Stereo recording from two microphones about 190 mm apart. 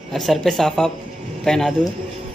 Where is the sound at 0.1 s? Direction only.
Centre (ahead or behind).